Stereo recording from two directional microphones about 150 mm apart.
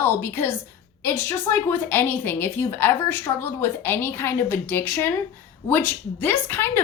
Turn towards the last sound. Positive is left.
turn(degrees=15)  # may be behind; listen again after turning